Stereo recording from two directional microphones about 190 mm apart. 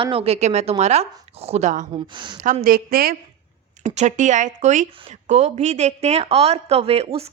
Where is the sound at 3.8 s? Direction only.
40° right (ahead or behind).